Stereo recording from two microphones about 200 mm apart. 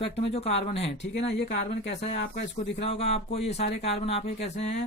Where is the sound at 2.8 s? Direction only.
30° left (ahead or behind).